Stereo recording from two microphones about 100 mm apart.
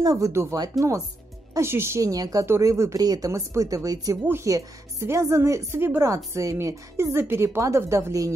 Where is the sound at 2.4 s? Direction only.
30° right (ahead or behind).